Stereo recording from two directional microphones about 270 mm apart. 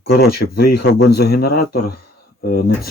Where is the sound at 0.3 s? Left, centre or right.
Left.